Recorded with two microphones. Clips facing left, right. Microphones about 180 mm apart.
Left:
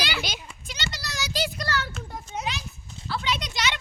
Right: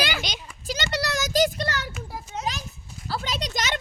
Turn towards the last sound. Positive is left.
turn(degrees=-45)  # may be behind; listen again after turning